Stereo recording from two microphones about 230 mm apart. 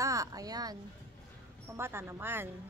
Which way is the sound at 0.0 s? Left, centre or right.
Centre.